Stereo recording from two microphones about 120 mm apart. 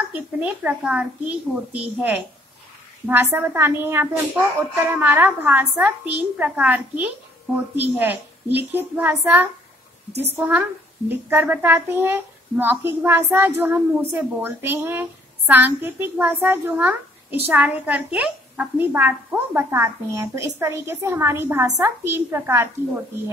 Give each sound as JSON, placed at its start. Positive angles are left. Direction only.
{"t": 0.1, "sound": "a woman's voice", "side_deg": -10}